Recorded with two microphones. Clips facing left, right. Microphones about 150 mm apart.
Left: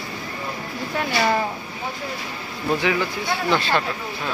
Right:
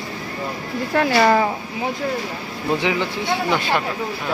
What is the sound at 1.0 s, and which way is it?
Speech, 90° right.